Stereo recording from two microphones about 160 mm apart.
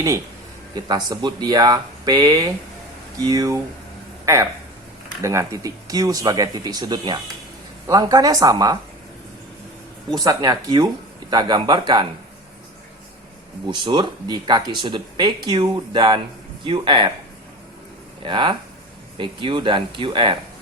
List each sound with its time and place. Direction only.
0.7 s speech: 25° right (ahead or behind)
5.2 s speech: 20° right (ahead or behind)
10.1 s speech: 25° right (ahead or behind)
13.7 s speech: 30° right (ahead or behind)
18.2 s speech: 30° right (ahead or behind)